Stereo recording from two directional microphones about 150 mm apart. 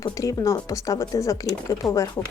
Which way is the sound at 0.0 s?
20° left (ahead or behind).